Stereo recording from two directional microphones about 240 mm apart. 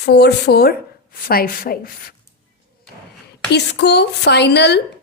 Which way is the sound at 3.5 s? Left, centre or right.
Left.